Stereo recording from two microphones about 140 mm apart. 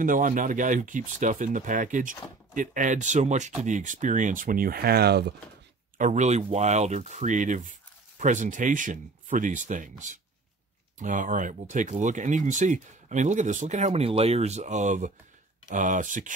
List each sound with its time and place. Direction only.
0.0 s speech: 75° right (ahead or behind)
5.9 s speech: 60° right (ahead or behind)